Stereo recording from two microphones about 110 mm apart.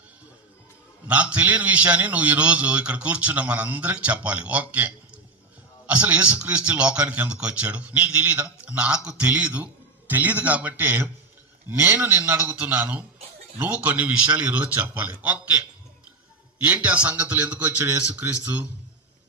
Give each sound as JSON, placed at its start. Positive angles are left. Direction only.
{"t": 1.0, "sound": "a man's voice", "side_deg": -10}